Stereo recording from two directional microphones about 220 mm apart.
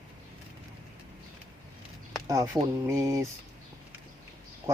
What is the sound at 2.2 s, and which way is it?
Speech, 15° right (ahead or behind).